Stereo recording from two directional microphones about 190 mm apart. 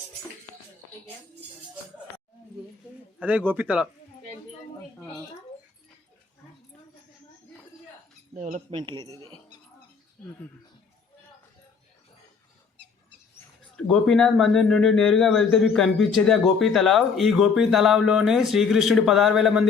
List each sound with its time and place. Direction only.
3.2 s speech: 10° right (ahead or behind)
8.4 s speech: 45° right (ahead or behind)
8.7 s speech: 25° right (ahead or behind)
13.7 s speech: 5° left (ahead or behind)